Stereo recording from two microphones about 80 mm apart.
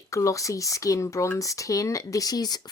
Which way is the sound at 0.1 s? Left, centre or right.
Left.